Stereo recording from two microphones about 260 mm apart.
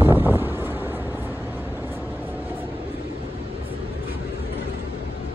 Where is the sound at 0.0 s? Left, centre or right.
Centre.